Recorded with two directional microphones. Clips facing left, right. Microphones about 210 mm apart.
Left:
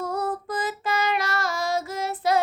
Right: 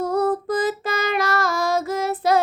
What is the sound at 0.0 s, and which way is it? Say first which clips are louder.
Child singing: right 7 dB; 40° right (ahead or behind).